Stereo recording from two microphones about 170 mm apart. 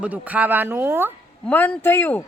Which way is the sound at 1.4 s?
10° left (ahead or behind).